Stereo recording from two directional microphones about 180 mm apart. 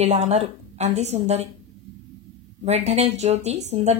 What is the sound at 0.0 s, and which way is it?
A woman's voice, 35° right (ahead or behind).